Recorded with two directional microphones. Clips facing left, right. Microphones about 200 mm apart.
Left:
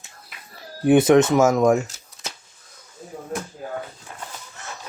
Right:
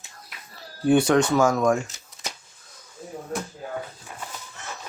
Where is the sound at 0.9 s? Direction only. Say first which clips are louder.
Left 4 dB; 20° left (ahead or behind).